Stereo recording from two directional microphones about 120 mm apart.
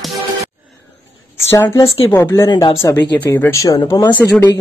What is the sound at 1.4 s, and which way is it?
A woman's voice, 20° left (ahead or behind).